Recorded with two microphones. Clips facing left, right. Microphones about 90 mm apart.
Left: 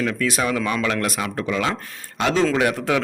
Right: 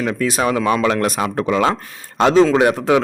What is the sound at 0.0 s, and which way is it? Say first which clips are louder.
Speech: right 4 dB; 20° right (ahead or behind).